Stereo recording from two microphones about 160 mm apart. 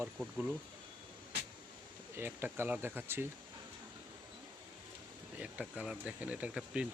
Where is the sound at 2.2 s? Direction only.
15° right (ahead or behind).